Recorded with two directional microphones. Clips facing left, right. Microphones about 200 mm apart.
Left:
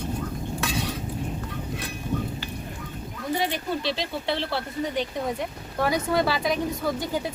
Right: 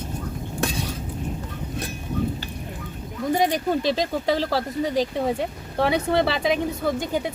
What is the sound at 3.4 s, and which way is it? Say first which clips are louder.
Speech: right 7 dB; 45° right (ahead or behind).